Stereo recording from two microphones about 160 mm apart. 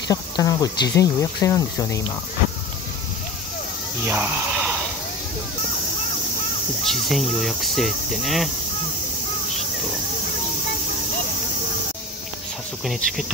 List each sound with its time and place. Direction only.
0.1 s cricket: 20° left (ahead or behind)
4.0 s speech: 10° right (ahead or behind)
6.9 s speech: centre (ahead or behind)